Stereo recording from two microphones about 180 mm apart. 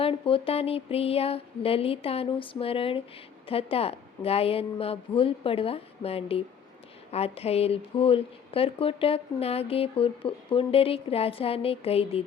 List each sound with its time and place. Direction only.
0.0 s a woman's voice: 30° left (ahead or behind)